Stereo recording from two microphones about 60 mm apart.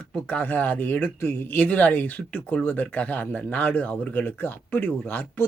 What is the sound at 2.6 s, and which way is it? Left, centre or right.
Speech, left.